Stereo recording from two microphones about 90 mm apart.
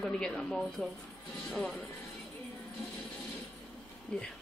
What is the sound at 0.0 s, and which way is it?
A woman's voice, 10° left (ahead or behind).